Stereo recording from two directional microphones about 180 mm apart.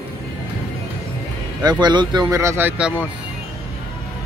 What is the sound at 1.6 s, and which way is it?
Speech, 25° right (ahead or behind).